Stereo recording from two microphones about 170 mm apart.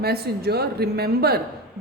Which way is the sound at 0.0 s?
65° right (ahead or behind).